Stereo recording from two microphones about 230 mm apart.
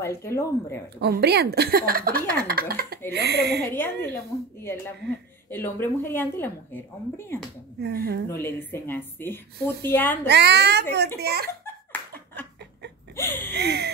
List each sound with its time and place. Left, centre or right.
0.0 s speech: centre
1.0 s a child's voice: right
3.6 s speech: centre
5.5 s speech: centre
7.8 s a child's voice: right
8.3 s speech: centre
10.2 s a child's voice: right
11.6 s a sound: centre
13.6 s a child's voice: right